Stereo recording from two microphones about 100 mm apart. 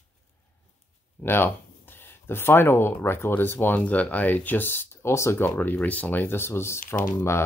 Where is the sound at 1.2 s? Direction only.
20° left (ahead or behind).